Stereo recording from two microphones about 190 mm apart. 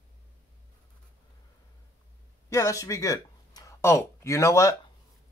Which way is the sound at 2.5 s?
15° left (ahead or behind).